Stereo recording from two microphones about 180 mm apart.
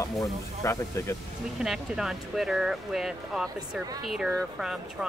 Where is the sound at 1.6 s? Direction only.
Centre (ahead or behind).